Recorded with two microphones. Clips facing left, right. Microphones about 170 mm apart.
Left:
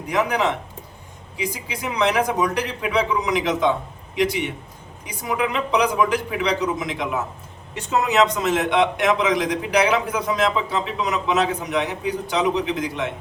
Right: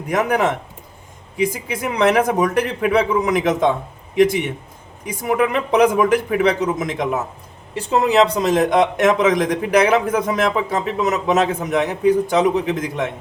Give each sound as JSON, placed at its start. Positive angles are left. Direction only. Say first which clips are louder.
{"t": 0.1, "sound": "a man's voice", "louder": "right 3 dB", "side_deg": -50}
{"t": 7.8, "sound": "speech", "louder": "right 4 dB", "side_deg": -35}